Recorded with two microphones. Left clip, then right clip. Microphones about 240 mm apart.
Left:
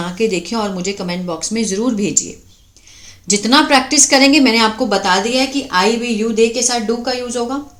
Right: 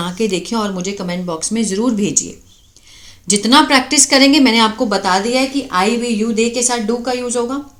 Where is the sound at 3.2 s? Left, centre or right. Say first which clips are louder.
Right 1 dB; centre.